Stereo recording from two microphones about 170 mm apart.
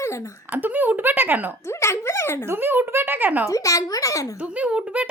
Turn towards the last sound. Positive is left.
turn(degrees=-5)  # may be behind; listen again after turning